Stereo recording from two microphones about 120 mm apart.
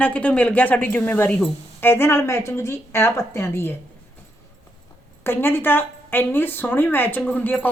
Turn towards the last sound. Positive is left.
turn(degrees=15)  # may be behind; listen again after turning